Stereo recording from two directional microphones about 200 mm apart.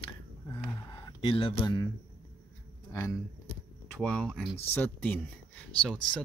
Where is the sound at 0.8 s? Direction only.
25° left (ahead or behind).